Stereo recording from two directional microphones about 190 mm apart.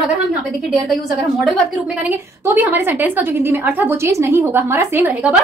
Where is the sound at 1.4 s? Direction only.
5° right (ahead or behind).